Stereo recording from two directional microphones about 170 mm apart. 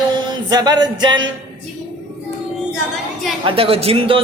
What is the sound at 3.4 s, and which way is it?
Speech, 35° right (ahead or behind).